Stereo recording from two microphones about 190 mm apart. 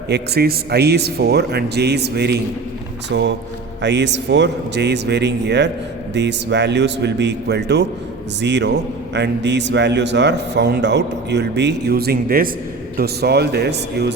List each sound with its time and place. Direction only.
0.1 s a man's voice: 55° right (ahead or behind)